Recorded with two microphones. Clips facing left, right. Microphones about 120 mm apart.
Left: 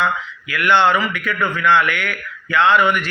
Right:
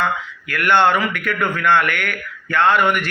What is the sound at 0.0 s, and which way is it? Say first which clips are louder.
A man's voice: left 1 dB; 50° right (ahead or behind).